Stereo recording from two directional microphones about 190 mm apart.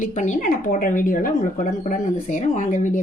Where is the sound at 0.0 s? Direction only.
40° left (ahead or behind).